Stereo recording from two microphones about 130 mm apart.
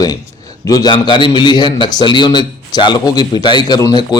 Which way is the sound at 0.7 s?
35° left (ahead or behind).